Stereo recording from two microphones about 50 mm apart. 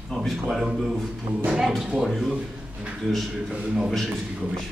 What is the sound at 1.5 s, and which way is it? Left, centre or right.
Speech, centre.